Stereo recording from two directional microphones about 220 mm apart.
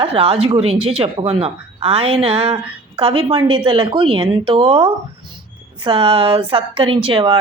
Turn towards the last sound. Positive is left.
turn(degrees=-25)  # may be behind; listen again after turning